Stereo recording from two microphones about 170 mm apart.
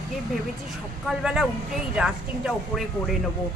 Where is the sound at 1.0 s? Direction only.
5° right (ahead or behind).